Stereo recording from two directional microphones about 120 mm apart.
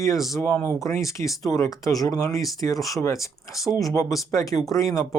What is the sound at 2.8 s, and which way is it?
Speech, centre (ahead or behind).